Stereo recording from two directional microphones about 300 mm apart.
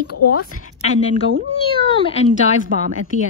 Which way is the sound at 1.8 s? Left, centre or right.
Centre.